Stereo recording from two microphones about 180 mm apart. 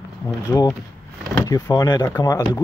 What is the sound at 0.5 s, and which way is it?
Speech, 10° left (ahead or behind).